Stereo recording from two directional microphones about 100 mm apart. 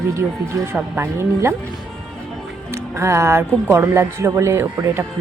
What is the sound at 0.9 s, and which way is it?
Speech, 25° right (ahead or behind).